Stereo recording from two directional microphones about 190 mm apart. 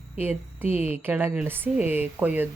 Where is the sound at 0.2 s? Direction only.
10° right (ahead or behind).